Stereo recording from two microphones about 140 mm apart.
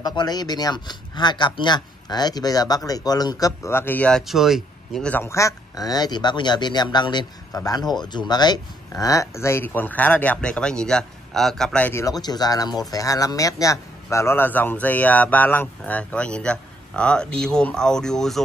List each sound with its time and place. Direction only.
0.0 s speech: 30° left (ahead or behind); by 4.2 s 10° left (ahead or behind)
4.3 s speech: centre (ahead or behind)
5.1 s speech: 20° left (ahead or behind)
11.9 s speech: 25° left (ahead or behind); by 18.4 s 5° left (ahead or behind)